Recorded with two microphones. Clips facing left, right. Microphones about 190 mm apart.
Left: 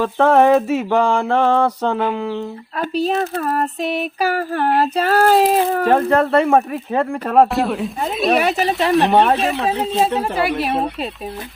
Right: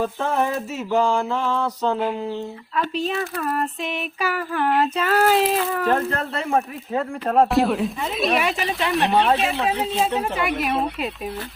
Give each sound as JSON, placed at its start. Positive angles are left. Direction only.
{"t": 0.0, "sound": "mantra", "side_deg": 70}
{"t": 2.7, "sound": "female singing", "side_deg": 40}
{"t": 5.2, "sound": "mantra", "side_deg": 40}
{"t": 7.5, "sound": "speech", "side_deg": 0}
{"t": 8.3, "sound": "female singing", "side_deg": 40}
{"t": 8.9, "sound": "speech", "side_deg": 0}